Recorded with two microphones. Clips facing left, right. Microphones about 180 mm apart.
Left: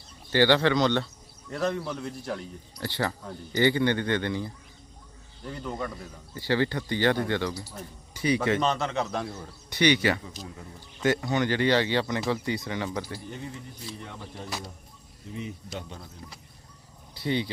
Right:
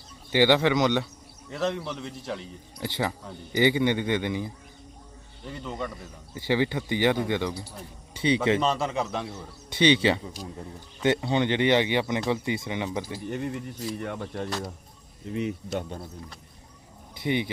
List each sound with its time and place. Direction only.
0.3 s a man's voice: 15° right (ahead or behind)
1.5 s a man's voice: centre (ahead or behind)
2.8 s a man's voice: 15° right (ahead or behind)
5.5 s a man's voice: centre (ahead or behind)
6.3 s a man's voice: 15° right (ahead or behind)
8.6 s a man's voice: 5° right (ahead or behind)
9.6 s speech: 25° right (ahead or behind)
13.2 s speech: 60° right (ahead or behind)
17.2 s speech: 20° right (ahead or behind)